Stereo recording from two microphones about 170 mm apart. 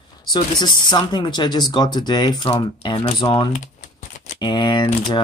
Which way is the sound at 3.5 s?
45° left (ahead or behind).